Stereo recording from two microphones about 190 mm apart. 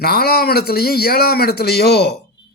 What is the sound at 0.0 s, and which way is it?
Speech, 55° left (ahead or behind).